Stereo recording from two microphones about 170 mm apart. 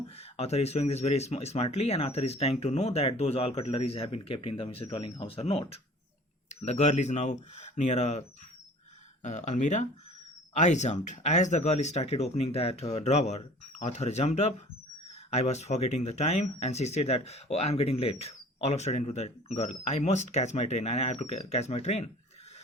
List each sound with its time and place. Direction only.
0.2 s speech: 40° left (ahead or behind)
9.2 s speech: 45° left (ahead or behind)